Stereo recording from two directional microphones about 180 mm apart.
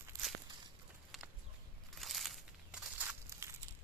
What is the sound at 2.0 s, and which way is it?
Crumpling, centre (ahead or behind).